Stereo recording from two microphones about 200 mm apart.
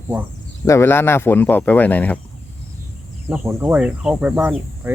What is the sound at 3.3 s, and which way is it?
Speech, 5° right (ahead or behind).